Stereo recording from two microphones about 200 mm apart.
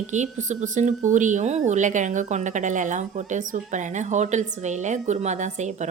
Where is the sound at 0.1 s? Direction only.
35° right (ahead or behind).